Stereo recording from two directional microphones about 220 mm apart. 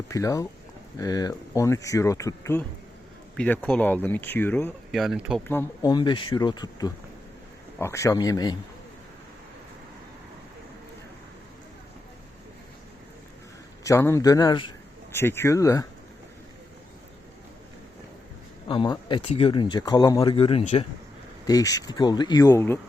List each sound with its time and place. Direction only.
0.1 s speech: 15° left (ahead or behind)
4.9 s speech: centre (ahead or behind)
5.5 s speech: 15° left (ahead or behind)
13.8 s speech: 10° left (ahead or behind)
18.7 s speech: 20° left (ahead or behind)